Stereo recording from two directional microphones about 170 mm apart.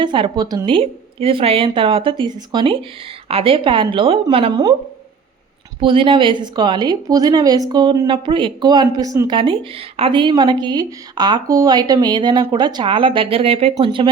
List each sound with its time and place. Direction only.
0.0 s a woman's voice: 30° right (ahead or behind)
5.8 s speech: 30° right (ahead or behind)